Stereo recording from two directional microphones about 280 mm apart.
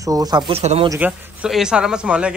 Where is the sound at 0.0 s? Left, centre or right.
Centre.